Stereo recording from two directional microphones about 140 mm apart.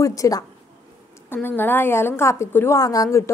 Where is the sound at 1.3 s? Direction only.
15° left (ahead or behind).